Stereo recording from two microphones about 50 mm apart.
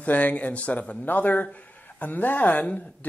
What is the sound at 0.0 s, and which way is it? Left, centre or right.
A man's voice, left.